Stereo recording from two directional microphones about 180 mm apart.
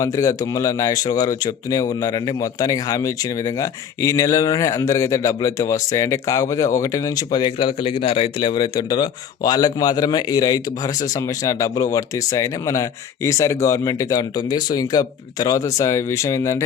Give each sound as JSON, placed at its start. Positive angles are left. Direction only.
{"t": 0.0, "sound": "speech", "side_deg": 20}